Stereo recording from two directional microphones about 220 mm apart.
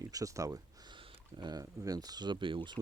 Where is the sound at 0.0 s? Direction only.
15° right (ahead or behind).